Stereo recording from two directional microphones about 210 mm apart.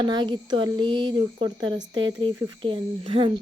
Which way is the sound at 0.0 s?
20° right (ahead or behind).